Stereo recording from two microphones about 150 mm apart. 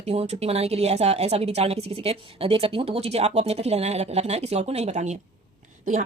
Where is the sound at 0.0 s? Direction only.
45° right (ahead or behind).